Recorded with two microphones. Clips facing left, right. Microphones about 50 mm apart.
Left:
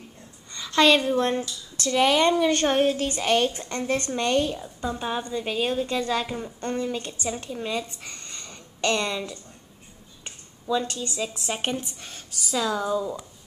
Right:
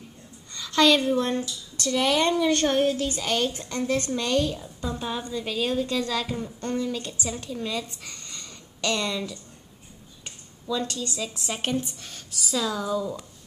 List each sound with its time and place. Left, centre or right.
0.6 s a woman's voice: left
2.7 s a woman's voice: left